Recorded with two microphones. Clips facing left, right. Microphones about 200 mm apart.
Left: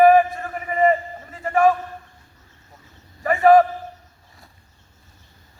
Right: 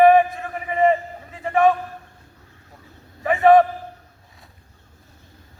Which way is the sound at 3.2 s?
Centre (ahead or behind).